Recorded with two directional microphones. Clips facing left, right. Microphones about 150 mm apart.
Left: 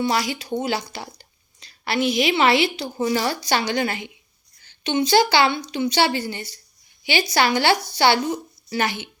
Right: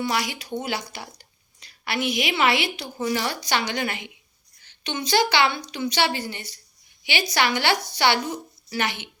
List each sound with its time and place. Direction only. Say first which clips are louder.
0.0 s a woman's voice: left 4 dB; 30° left (ahead or behind)